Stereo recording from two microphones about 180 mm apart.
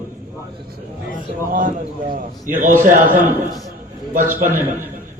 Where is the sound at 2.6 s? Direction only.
45° right (ahead or behind).